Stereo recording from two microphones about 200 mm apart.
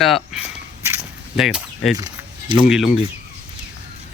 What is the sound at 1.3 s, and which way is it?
Speech, centre (ahead or behind).